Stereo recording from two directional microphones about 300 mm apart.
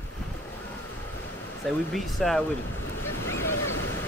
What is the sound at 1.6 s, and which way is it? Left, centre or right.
Speech, centre.